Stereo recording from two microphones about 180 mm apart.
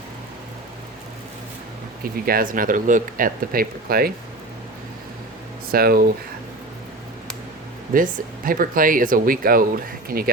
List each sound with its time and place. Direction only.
2.2 s speech: 50° right (ahead or behind)
5.7 s speech: 55° right (ahead or behind)
7.9 s speech: 50° right (ahead or behind)